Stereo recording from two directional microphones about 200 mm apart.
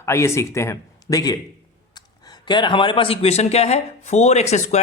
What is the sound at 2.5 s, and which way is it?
Speech, 25° left (ahead or behind).